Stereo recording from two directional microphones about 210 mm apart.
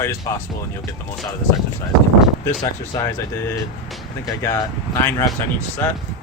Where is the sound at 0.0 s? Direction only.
15° left (ahead or behind).